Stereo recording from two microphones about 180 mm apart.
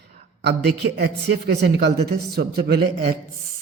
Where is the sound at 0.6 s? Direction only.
60° right (ahead or behind).